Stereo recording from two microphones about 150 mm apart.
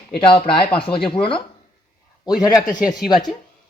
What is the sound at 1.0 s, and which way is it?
Speech, 5° left (ahead or behind).